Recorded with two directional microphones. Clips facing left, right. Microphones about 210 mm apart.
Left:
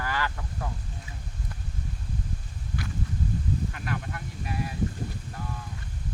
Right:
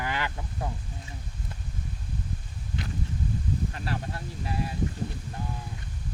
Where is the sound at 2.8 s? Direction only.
25° right (ahead or behind).